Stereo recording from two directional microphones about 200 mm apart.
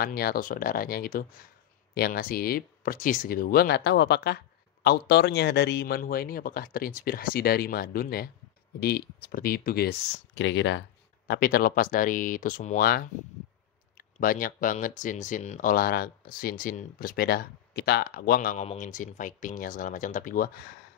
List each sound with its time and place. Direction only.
0.0 s speech: 50° left (ahead or behind); by 10.8 s 65° left (ahead or behind)
11.2 s speech: 45° left (ahead or behind)